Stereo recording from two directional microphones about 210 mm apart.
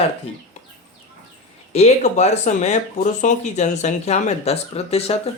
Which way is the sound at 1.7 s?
30° left (ahead or behind).